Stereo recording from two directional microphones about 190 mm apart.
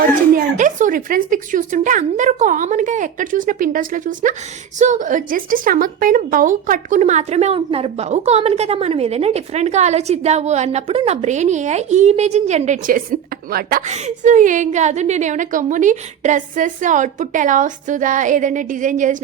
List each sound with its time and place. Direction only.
0.3 s a woman's voice: 40° right (ahead or behind)
13.8 s a woman's voice: 35° right (ahead or behind)